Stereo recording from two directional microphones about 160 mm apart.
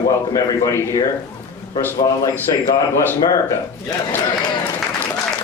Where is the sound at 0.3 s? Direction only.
20° left (ahead or behind).